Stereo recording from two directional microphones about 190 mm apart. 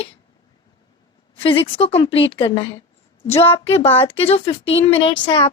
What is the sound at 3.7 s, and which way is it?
A woman's voice, 30° left (ahead or behind).